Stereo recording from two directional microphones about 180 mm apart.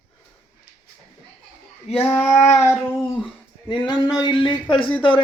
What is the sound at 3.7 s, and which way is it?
Speech, 25° left (ahead or behind).